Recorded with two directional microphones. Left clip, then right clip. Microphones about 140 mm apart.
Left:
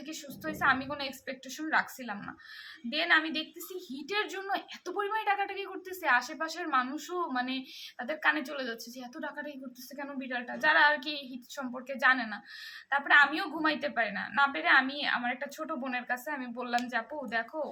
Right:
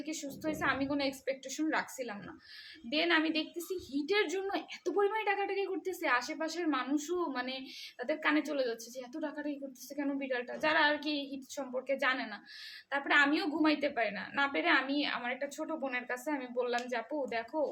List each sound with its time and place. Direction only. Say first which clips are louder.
0.0 s a woman's voice: right 1 dB; 20° right (ahead or behind)